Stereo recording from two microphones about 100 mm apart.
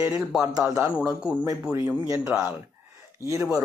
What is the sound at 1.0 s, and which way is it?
Speech, 10° right (ahead or behind).